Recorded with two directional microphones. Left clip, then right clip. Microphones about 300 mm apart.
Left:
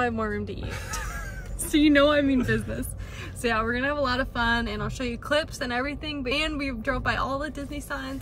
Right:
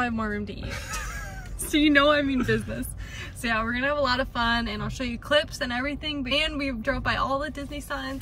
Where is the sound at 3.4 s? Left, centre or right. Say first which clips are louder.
Left 1 dB; right.